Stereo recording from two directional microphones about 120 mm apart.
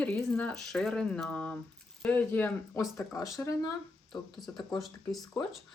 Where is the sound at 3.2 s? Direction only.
25° left (ahead or behind).